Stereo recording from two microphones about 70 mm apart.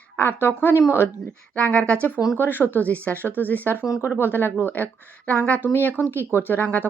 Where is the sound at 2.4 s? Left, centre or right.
Left.